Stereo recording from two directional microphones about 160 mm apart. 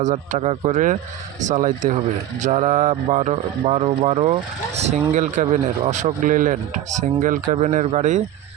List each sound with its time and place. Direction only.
0.0 s speech: 50° right (ahead or behind)